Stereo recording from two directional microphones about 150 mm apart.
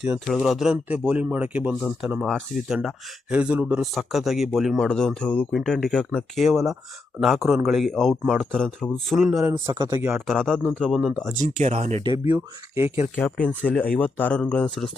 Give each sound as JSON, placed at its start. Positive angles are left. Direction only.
{"t": 0.0, "sound": "speech", "side_deg": -5}
{"t": 9.4, "sound": "speech", "side_deg": -20}
{"t": 9.7, "sound": "speech", "side_deg": -30}
{"t": 10.0, "sound": "speech", "side_deg": -15}
{"t": 10.2, "sound": "speech", "side_deg": 5}
{"t": 11.3, "sound": "speech", "side_deg": -50}
{"t": 12.3, "sound": "speech", "side_deg": -15}
{"t": 13.1, "sound": "speech", "side_deg": 10}